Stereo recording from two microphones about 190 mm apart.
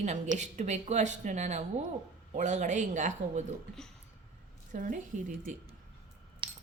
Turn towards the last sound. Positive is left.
turn(degrees=-25)  # may be behind; listen again after turning